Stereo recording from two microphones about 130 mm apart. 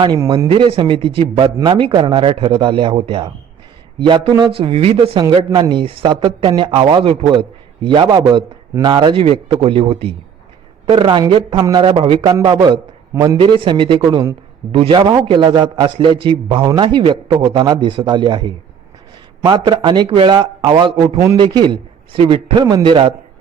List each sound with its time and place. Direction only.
0.0 s a man's voice: 35° right (ahead or behind)
0.4 s a man's voice: 45° right (ahead or behind)
5.3 s a man's voice: 35° right (ahead or behind)